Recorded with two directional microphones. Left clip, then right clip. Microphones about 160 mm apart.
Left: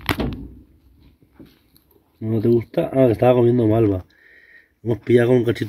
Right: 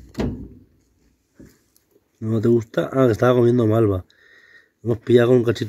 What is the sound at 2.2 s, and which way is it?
Speech, 30° right (ahead or behind).